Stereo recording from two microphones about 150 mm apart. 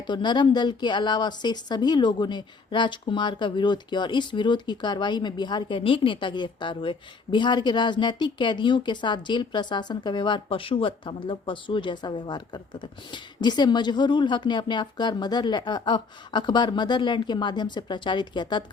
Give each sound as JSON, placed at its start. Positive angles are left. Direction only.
{"t": 0.1, "sound": "speech", "side_deg": 30}